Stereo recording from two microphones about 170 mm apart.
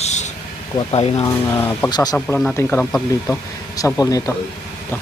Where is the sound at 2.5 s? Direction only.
10° left (ahead or behind).